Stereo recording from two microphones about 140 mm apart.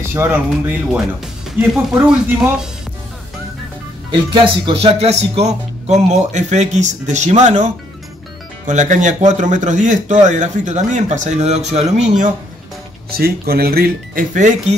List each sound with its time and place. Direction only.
0.1 s speech: 15° right (ahead or behind)
4.1 s speech: 35° right (ahead or behind); by 12.3 s 55° right (ahead or behind)
13.2 s speech: 90° right; by 14.6 s 65° right (ahead or behind)